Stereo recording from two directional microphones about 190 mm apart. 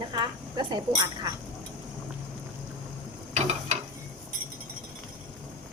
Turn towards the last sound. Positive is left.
turn(degrees=-35)  # may be behind; listen again after turning